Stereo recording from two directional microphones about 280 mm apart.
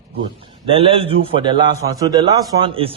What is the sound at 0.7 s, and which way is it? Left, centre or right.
A man's voice, centre.